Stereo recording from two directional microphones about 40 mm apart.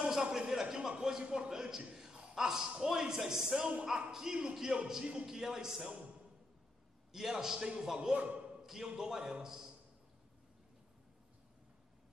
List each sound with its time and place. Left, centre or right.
0.0 s a sound: centre
0.5 s speech: centre
1.2 s a man's voice: right
1.5 s speech: centre
7.1 s speech: centre
8.1 s a man's voice: right
8.6 s speech: centre